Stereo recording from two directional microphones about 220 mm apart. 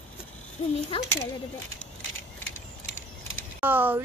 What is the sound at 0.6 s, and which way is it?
Speech, 30° left (ahead or behind).